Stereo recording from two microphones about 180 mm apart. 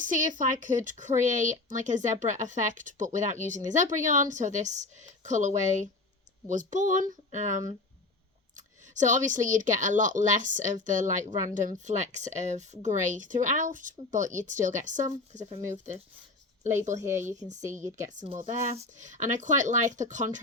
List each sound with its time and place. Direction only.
0.0 s speech: 45° right (ahead or behind)
15.6 s a woman's voice: 15° right (ahead or behind)
17.0 s a woman's voice: 15° right (ahead or behind)
18.3 s speech: 45° right (ahead or behind)